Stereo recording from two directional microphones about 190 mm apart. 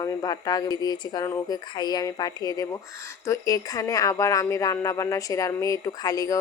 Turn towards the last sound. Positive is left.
turn(degrees=20)  # may be behind; listen again after turning